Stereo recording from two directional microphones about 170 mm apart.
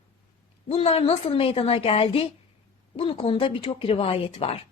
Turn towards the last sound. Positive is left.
turn(degrees=35)  # may be behind; listen again after turning